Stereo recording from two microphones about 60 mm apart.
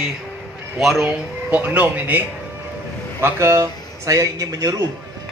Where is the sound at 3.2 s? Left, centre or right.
Right.